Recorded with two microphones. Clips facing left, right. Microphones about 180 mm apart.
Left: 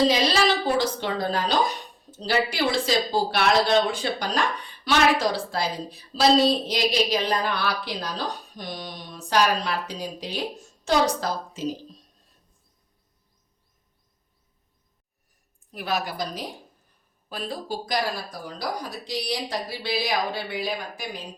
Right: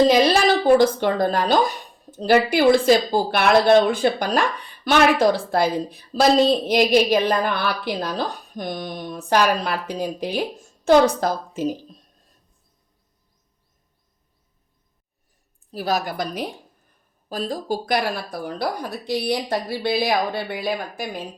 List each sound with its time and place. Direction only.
0.0 s a sound: 50° right (ahead or behind)
2.0 s a woman's voice: 55° right (ahead or behind)
15.7 s a woman's voice: 40° right (ahead or behind); by 16.5 s 60° right (ahead or behind)
17.2 s speech: 40° right (ahead or behind)